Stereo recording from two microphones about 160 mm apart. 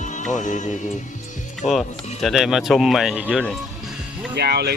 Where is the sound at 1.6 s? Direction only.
Centre (ahead or behind).